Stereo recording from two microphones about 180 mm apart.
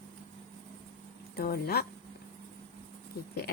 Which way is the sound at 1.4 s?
60° left (ahead or behind).